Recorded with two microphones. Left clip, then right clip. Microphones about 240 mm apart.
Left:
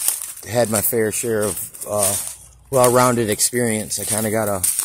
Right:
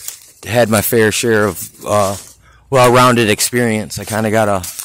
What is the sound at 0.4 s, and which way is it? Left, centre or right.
Speech, right.